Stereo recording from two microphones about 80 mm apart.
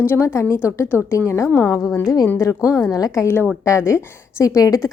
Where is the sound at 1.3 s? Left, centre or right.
Left.